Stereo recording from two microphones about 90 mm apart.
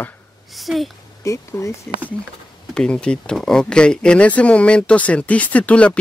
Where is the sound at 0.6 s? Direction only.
Centre (ahead or behind).